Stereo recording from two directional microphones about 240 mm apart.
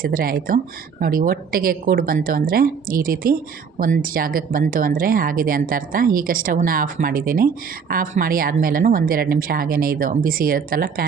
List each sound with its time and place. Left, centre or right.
0.0 s speech: right